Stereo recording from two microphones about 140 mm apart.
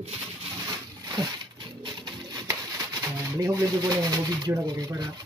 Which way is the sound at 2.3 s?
25° right (ahead or behind).